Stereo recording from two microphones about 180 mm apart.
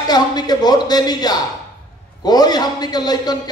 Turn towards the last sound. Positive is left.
turn(degrees=20)  # may be behind; listen again after turning